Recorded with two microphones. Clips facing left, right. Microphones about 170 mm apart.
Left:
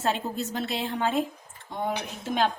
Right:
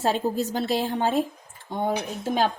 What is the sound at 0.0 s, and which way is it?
A woman's voice, 35° right (ahead or behind).